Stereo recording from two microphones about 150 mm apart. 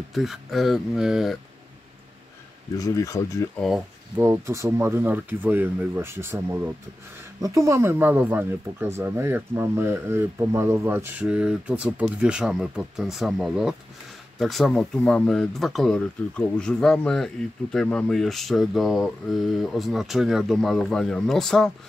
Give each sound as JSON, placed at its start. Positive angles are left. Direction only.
{"t": 0.1, "sound": "speech", "side_deg": 0}
{"t": 2.8, "sound": "speech", "side_deg": 20}
{"t": 3.5, "sound": "speech", "side_deg": 0}
{"t": 4.2, "sound": "speech", "side_deg": -15}